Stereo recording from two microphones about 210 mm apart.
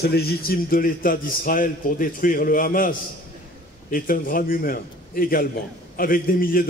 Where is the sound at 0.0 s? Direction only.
50° left (ahead or behind).